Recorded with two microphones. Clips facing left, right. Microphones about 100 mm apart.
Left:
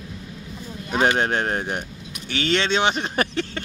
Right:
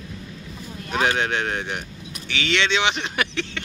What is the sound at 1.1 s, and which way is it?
Speech, 40° left (ahead or behind).